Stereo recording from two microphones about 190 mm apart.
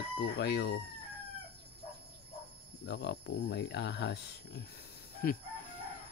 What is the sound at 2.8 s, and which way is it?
Chicken, 60° left (ahead or behind).